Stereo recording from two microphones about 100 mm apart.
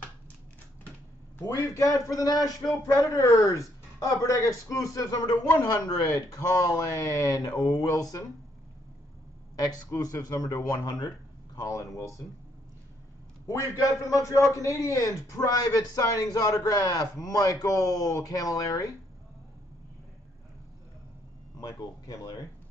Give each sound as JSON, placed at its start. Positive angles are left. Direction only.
{"t": 1.6, "sound": "a man's voice", "side_deg": 35}
{"t": 9.8, "sound": "a man's voice", "side_deg": 35}
{"t": 13.5, "sound": "a man's voice", "side_deg": 30}
{"t": 21.5, "sound": "a man's voice", "side_deg": 40}